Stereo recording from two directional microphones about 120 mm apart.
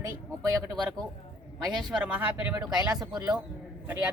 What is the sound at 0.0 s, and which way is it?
Speech, 30° right (ahead or behind).